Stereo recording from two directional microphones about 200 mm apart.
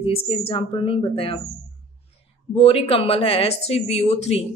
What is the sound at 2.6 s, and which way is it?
Speech, 30° left (ahead or behind).